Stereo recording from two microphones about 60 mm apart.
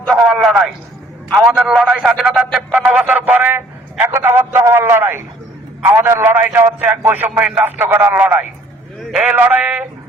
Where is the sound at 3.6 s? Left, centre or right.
Right.